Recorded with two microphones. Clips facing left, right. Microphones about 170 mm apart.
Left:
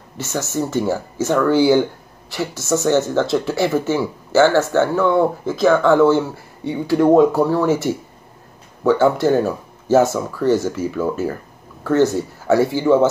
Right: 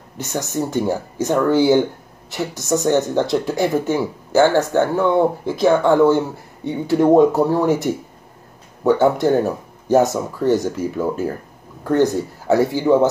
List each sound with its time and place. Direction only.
0.2 s speech: 15° right (ahead or behind)